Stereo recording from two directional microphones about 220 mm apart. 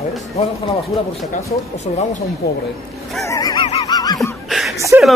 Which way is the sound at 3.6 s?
25° left (ahead or behind).